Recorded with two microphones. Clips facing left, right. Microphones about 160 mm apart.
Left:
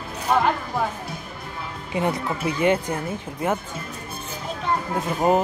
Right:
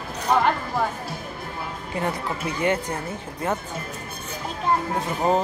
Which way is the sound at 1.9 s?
20° left (ahead or behind).